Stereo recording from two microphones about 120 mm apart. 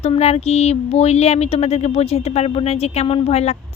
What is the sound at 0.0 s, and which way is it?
Speech, 60° left (ahead or behind).